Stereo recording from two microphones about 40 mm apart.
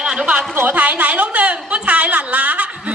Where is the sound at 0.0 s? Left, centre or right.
Centre.